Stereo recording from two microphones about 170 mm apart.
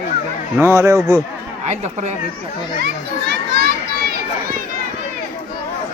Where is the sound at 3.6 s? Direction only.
65° right (ahead or behind).